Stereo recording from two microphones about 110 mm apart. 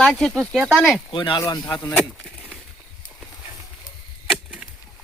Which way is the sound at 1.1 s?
50° left (ahead or behind).